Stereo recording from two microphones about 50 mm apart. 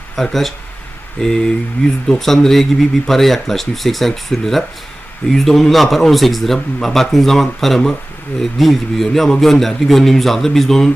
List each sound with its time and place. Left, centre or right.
0.2 s a man's voice: centre